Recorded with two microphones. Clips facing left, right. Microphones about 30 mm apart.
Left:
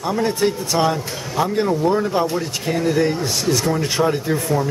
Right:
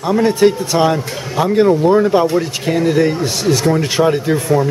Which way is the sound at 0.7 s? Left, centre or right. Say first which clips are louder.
Right 5 dB; centre.